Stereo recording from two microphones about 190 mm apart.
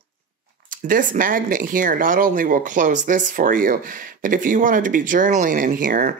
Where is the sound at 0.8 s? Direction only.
45° right (ahead or behind).